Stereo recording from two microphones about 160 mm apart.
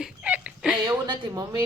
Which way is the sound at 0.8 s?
25° right (ahead or behind).